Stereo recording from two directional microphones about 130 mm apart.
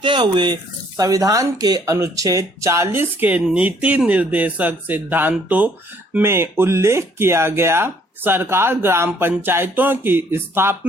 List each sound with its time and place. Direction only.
0.0 s speech: 40° right (ahead or behind); by 10.8 s 20° right (ahead or behind)